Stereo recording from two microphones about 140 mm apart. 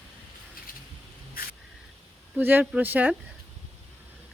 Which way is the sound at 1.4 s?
90° left.